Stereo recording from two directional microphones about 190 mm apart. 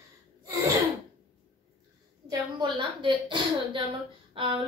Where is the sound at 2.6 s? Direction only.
25° right (ahead or behind).